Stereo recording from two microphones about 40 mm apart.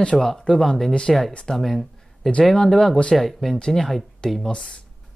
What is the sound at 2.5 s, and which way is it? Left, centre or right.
Speech, centre.